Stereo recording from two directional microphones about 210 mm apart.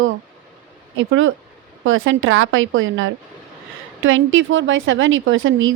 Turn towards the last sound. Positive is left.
turn(degrees=-65)  # may be behind; listen again after turning